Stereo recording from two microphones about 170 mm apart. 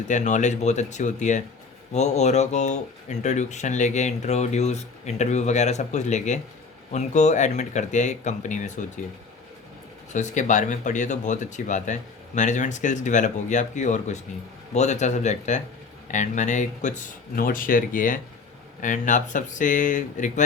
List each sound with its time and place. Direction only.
0.1 s speech: 45° left (ahead or behind)
10.1 s speech: 45° left (ahead or behind)